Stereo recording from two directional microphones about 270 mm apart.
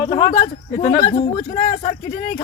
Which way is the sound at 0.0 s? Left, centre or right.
Centre.